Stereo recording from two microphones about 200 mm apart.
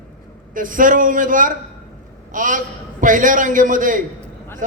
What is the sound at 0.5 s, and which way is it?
A man's voice, 40° right (ahead or behind).